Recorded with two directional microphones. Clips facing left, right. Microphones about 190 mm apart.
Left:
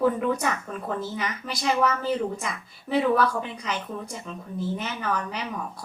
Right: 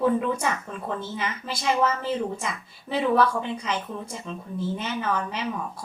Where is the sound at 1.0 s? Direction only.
25° right (ahead or behind).